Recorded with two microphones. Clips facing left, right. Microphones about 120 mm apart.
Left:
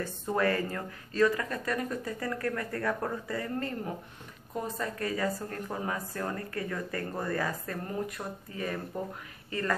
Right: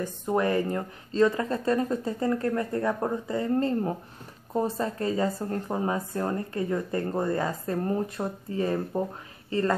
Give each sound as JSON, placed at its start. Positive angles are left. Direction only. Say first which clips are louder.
{"t": 0.0, "sound": "speech", "louder": "right 3 dB", "side_deg": -20}